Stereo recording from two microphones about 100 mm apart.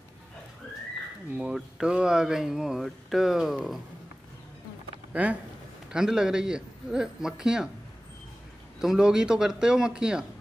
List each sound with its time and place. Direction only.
1.3 s speech: 10° right (ahead or behind)
5.1 s a man's voice: 15° right (ahead or behind)
8.7 s a man's voice: 5° right (ahead or behind)